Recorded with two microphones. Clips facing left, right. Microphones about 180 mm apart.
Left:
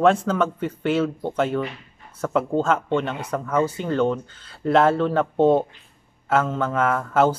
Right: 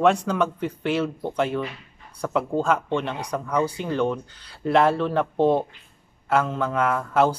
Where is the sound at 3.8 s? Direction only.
10° right (ahead or behind).